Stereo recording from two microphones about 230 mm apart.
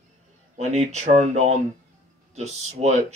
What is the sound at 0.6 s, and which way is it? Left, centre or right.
Speech, right.